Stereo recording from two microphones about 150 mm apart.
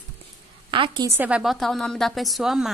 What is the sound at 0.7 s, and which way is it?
Speech, 35° right (ahead or behind).